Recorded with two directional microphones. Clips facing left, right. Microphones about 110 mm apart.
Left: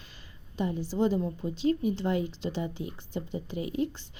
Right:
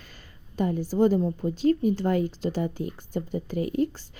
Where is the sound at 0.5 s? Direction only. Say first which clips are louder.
Right 5 dB; 50° right (ahead or behind).